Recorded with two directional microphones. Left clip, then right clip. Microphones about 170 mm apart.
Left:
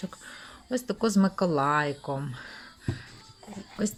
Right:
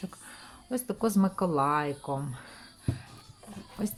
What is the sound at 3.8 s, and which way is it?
Speech, 5° left (ahead or behind).